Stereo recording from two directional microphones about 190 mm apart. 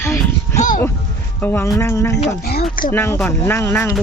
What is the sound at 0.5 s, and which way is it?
Music, 40° left (ahead or behind).